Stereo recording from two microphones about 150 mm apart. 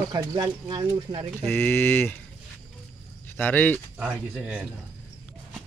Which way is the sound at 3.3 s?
10° left (ahead or behind).